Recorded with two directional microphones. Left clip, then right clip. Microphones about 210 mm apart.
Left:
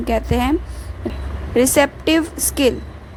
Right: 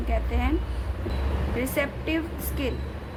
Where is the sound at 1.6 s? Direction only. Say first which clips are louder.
Left 14 dB; 40° left (ahead or behind).